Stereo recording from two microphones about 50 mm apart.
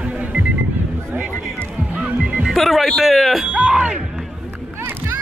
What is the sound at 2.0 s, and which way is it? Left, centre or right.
Music, right.